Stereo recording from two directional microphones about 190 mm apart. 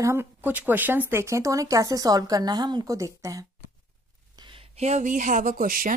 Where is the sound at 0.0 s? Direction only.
15° right (ahead or behind).